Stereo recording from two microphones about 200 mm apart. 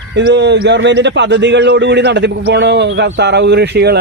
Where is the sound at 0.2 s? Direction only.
60° right (ahead or behind).